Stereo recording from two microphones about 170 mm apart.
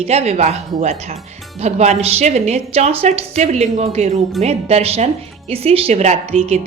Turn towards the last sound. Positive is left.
turn(degrees=-40)  # may be behind; listen again after turning